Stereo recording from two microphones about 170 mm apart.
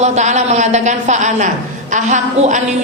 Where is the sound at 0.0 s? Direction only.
40° right (ahead or behind).